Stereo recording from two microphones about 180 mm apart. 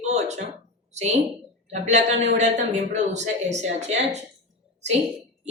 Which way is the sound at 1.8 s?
40° right (ahead or behind).